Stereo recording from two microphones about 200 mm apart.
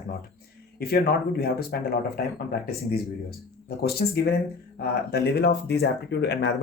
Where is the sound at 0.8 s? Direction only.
50° left (ahead or behind).